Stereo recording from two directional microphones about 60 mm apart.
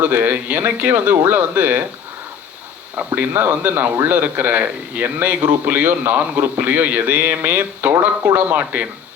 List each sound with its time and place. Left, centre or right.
0.0 s speech: right
3.2 s a man's voice: right